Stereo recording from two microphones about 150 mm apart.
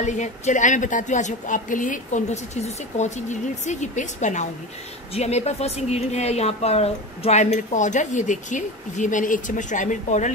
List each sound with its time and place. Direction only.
0.0 s a woman's voice: 55° left (ahead or behind)